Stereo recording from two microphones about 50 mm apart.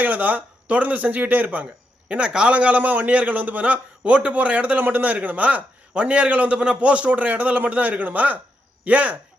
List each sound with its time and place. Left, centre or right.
0.0 s a man's voice: right
2.0 s a man's voice: right